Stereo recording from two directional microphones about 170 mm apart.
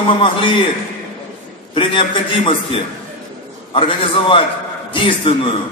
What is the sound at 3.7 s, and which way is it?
A man's voice, 30° left (ahead or behind).